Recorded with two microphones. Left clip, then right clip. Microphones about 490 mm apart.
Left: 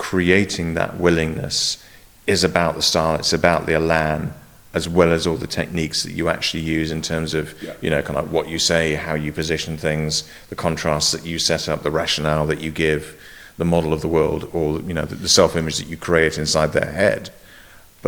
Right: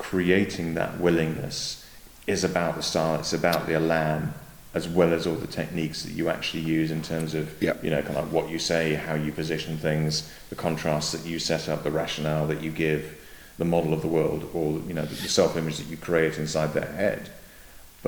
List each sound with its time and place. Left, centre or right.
0.0 s speech: left